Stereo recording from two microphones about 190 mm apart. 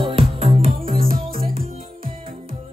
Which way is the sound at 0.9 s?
50° right (ahead or behind).